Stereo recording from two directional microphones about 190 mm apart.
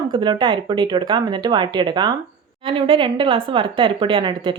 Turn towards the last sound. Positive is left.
turn(degrees=-25)  # may be behind; listen again after turning